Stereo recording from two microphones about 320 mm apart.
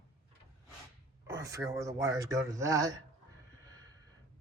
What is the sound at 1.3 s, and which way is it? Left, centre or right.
Speech, centre.